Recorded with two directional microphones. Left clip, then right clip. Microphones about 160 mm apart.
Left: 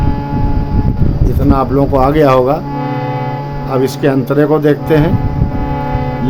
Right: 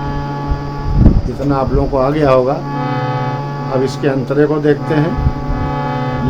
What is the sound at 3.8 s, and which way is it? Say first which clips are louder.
Speech: left 5 dB; 65° left (ahead or behind).